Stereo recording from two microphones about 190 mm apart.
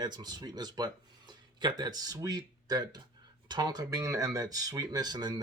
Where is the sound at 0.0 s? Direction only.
20° right (ahead or behind).